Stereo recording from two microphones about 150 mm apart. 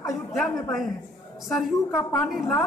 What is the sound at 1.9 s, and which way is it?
Speech, 10° left (ahead or behind).